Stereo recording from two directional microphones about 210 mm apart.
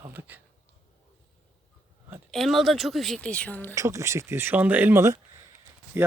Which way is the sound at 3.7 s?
15° right (ahead or behind).